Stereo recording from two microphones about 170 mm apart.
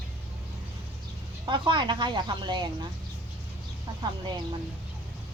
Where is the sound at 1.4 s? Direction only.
30° right (ahead or behind).